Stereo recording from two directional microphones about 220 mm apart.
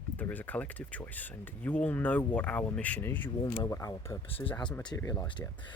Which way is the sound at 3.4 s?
20° left (ahead or behind).